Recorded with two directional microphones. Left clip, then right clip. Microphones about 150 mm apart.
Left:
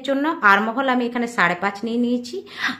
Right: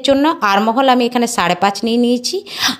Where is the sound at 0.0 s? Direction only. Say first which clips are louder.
Right 5 dB; 45° right (ahead or behind).